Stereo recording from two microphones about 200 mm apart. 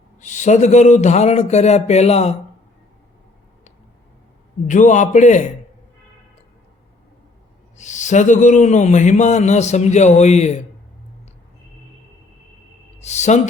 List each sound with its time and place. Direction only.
0.2 s speech: 35° left (ahead or behind)
4.7 s speech: 40° left (ahead or behind)
7.8 s speech: 35° left (ahead or behind)
13.0 s speech: 35° left (ahead or behind)